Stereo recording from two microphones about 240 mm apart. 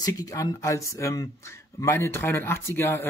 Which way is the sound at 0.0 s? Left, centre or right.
Centre.